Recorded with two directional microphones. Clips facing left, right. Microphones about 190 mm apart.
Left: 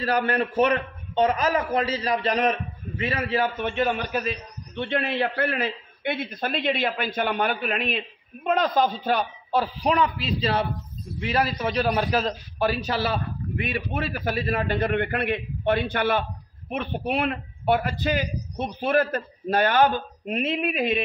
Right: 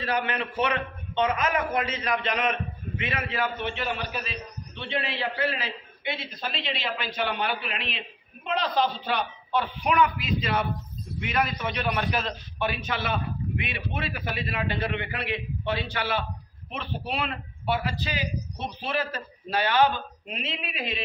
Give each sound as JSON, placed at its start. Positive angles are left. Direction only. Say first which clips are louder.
{"t": 0.0, "sound": "a man's voice", "louder": "left 5 dB", "side_deg": 40}